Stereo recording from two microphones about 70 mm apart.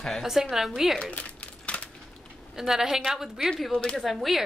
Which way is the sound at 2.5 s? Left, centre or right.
Centre.